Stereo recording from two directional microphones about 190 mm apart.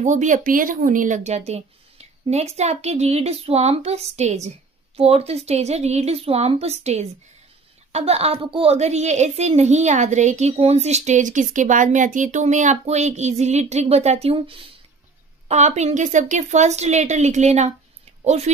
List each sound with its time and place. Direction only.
0.0 s a woman's voice: 40° right (ahead or behind)